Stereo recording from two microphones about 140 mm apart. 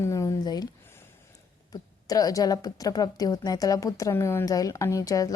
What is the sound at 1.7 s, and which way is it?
A woman's voice, 25° left (ahead or behind).